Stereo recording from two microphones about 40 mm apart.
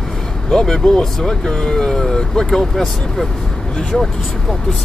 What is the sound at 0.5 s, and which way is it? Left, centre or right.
Speech, centre.